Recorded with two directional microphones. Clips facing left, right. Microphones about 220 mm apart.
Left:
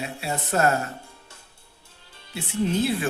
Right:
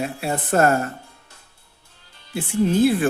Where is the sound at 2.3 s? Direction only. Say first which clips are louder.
Right 5 dB; 50° right (ahead or behind).